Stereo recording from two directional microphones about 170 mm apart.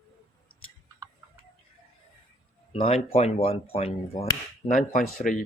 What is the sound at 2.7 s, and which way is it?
Speech, 35° left (ahead or behind).